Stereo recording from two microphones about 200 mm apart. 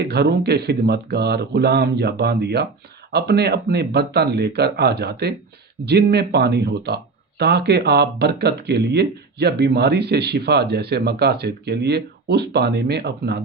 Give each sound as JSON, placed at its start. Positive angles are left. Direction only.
{"t": 0.0, "sound": "speech", "side_deg": -55}